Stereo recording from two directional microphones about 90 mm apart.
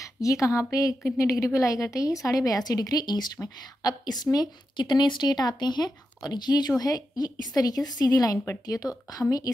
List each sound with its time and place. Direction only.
0.0 s a woman's voice: 40° left (ahead or behind)